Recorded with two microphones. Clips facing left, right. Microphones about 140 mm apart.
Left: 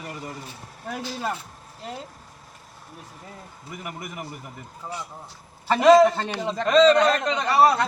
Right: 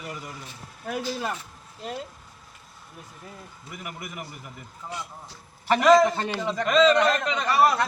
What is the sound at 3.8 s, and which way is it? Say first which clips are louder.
Speech: left 2 dB; 40° left (ahead or behind).